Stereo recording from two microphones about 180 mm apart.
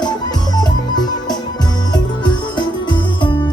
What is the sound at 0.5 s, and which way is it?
Music, 20° left (ahead or behind).